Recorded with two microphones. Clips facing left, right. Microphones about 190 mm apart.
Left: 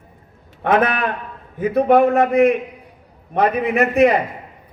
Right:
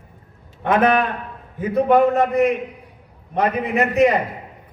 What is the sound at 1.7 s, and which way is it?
A man's voice, 60° left (ahead or behind).